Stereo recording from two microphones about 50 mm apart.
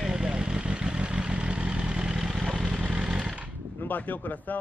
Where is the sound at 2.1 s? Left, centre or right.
Centre.